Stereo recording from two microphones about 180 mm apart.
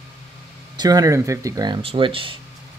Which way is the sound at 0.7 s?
20° right (ahead or behind).